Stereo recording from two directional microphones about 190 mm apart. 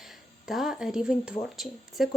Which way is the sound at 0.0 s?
Centre (ahead or behind).